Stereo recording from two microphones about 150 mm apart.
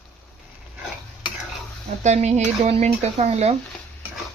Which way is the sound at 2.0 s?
50° right (ahead or behind).